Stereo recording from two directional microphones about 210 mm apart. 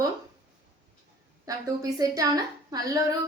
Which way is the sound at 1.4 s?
15° right (ahead or behind).